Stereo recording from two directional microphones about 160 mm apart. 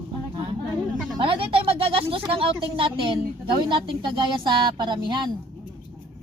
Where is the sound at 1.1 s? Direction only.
35° right (ahead or behind).